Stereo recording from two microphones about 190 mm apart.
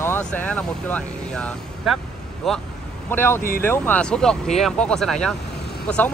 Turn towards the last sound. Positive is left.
turn(degrees=5)  # may be behind; listen again after turning